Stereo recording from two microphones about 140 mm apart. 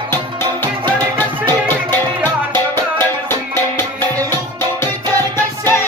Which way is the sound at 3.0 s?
15° left (ahead or behind).